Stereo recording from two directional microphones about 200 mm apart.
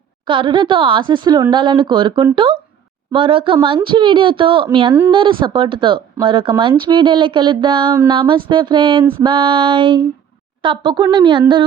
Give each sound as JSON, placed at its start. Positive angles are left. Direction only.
{"t": 0.3, "sound": "speech", "side_deg": -25}